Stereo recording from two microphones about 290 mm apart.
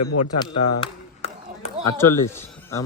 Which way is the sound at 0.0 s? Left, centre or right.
Left.